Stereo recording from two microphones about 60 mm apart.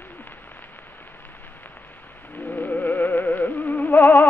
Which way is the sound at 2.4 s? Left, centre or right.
Left.